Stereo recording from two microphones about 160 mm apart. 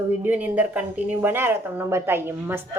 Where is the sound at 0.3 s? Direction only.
10° right (ahead or behind).